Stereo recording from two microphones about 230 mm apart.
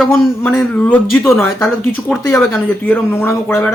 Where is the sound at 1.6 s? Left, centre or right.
Centre.